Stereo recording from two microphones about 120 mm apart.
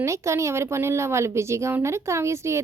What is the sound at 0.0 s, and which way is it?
Speech, 25° right (ahead or behind).